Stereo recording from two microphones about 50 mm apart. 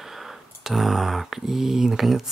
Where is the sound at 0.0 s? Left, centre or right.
Centre.